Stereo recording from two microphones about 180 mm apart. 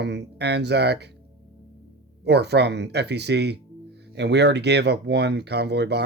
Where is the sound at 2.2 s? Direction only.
65° right (ahead or behind).